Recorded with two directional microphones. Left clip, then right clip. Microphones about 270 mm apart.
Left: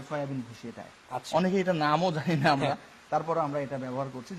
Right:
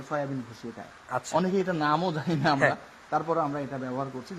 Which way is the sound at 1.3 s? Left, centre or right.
Left.